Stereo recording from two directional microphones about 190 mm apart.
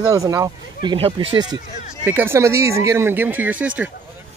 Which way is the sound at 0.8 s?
30° right (ahead or behind).